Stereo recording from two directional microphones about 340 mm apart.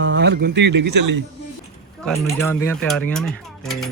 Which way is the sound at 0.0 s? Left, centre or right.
Right.